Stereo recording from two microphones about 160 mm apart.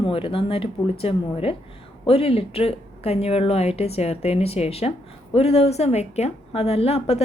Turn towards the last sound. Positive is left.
turn(degrees=40)  # may be behind; listen again after turning